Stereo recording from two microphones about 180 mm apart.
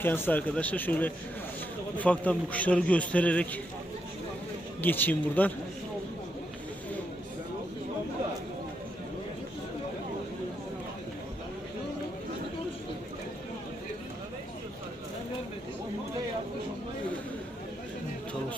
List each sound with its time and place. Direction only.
0.0 s a man's voice: 10° left (ahead or behind)
4.8 s a man's voice: 10° left (ahead or behind)